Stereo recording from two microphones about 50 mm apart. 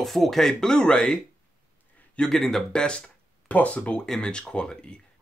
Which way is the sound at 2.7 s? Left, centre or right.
Centre.